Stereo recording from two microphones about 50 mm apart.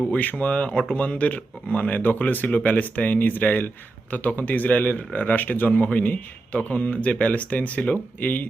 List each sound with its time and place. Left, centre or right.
0.1 s a man's voice: left